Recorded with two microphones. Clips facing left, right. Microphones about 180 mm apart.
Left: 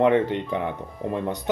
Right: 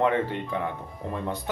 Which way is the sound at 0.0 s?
20° left (ahead or behind).